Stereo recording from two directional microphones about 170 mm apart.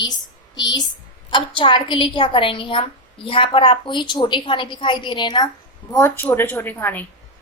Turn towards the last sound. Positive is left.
turn(degrees=10)  # may be behind; listen again after turning